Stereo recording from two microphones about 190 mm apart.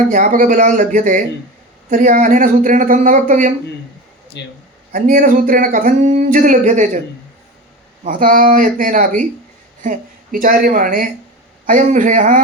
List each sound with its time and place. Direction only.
0.1 s speech: 40° right (ahead or behind)
4.4 s speech: 65° left (ahead or behind)
4.9 s speech: 45° right (ahead or behind)
8.0 s speech: 45° right (ahead or behind)